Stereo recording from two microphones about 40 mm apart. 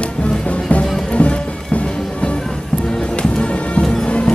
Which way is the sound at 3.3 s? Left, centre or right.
Left.